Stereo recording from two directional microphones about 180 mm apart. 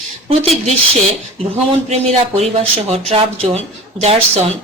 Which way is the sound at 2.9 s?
30° right (ahead or behind).